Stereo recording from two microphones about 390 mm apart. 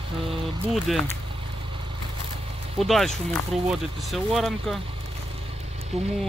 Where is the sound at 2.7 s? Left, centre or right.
Centre.